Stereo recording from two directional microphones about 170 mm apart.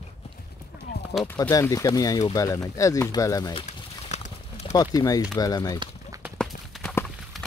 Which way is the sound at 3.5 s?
40° left (ahead or behind).